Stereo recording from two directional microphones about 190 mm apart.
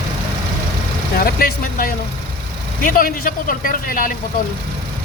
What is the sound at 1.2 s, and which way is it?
Speech, 50° left (ahead or behind).